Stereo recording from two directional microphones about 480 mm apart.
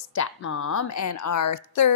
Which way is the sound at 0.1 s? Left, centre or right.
Left.